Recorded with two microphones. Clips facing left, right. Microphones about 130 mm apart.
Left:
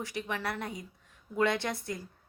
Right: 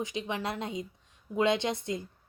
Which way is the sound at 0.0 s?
20° right (ahead or behind).